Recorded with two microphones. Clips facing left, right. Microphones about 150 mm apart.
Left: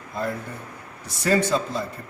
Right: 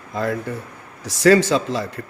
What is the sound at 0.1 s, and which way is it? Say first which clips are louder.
Speech: right 5 dB; 90° right.